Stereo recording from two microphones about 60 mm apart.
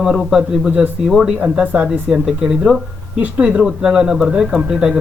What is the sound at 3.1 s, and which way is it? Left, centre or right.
Speech, right.